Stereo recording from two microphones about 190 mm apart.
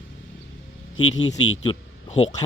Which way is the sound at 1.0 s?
90° left.